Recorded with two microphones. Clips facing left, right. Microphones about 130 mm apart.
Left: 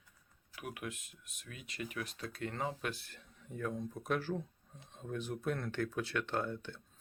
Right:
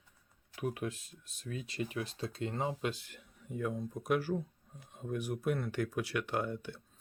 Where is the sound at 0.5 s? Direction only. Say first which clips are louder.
Right 7 dB; 30° right (ahead or behind).